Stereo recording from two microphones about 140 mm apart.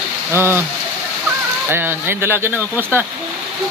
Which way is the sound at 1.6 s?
15° right (ahead or behind).